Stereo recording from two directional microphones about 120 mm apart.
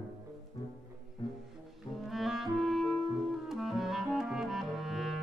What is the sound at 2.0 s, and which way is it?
Clarinet, centre (ahead or behind).